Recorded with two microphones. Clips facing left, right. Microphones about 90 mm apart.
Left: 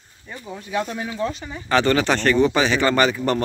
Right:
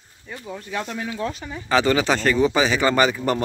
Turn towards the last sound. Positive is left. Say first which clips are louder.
# left 1 dB
turn(degrees=-10)  # may be behind; listen again after turning